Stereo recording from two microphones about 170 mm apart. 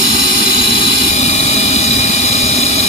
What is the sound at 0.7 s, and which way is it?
Vehicle, 40° left (ahead or behind).